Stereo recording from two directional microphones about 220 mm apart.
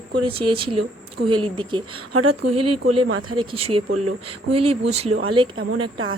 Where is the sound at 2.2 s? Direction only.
90° right.